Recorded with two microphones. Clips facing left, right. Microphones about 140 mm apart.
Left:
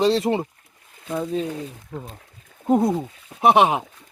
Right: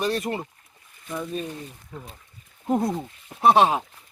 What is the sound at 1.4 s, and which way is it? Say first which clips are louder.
Speech: left 6 dB; 90° left.